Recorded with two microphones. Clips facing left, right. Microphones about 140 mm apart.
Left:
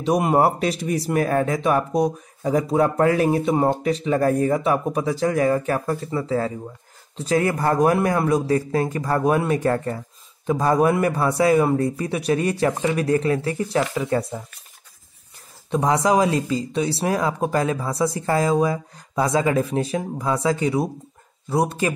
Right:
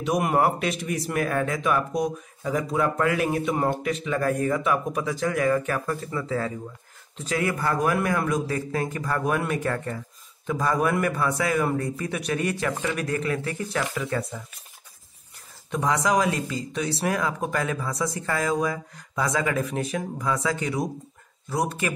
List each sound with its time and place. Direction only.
0.0 s a man's voice: 30° left (ahead or behind)
15.7 s a man's voice: 35° left (ahead or behind)